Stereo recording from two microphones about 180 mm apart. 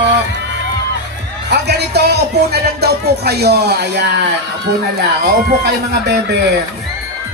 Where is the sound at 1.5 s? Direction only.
65° right (ahead or behind).